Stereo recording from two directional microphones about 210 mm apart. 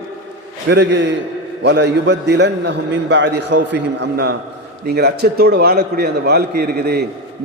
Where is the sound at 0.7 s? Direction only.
55° right (ahead or behind).